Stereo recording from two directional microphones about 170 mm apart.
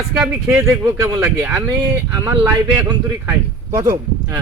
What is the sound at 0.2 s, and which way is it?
Speech, 10° right (ahead or behind).